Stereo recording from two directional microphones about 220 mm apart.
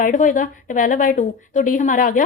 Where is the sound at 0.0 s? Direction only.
35° left (ahead or behind).